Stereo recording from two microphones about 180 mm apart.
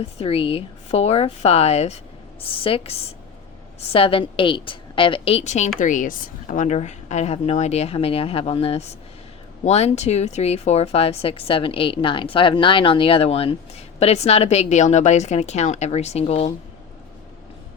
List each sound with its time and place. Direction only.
0.2 s speech: 30° left (ahead or behind)